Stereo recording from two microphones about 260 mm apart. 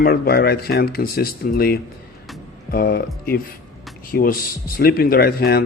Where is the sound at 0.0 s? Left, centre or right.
Left.